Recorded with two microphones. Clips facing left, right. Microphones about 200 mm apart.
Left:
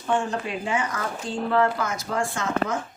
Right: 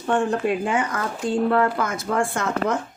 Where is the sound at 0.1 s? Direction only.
55° right (ahead or behind).